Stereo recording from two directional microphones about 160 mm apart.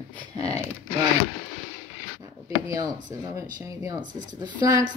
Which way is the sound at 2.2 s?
20° right (ahead or behind).